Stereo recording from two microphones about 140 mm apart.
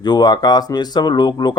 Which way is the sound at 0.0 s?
30° left (ahead or behind).